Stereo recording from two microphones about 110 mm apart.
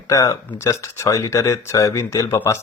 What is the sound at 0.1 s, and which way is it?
Speech, 30° left (ahead or behind).